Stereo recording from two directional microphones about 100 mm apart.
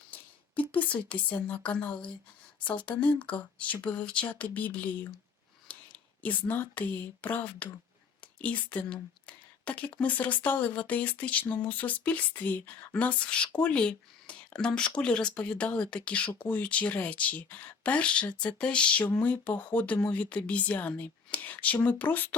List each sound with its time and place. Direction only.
0.7 s a woman's voice: 15° left (ahead or behind)